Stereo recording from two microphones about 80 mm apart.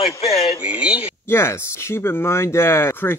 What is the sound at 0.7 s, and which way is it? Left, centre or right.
Speech, centre.